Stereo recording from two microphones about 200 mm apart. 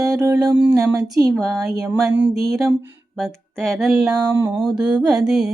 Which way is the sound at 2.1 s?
60° right (ahead or behind).